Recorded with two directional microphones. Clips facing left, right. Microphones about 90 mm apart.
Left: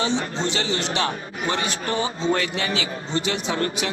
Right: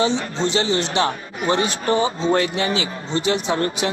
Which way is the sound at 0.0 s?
30° right (ahead or behind).